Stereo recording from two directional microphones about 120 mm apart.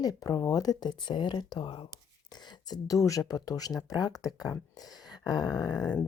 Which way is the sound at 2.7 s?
30° left (ahead or behind).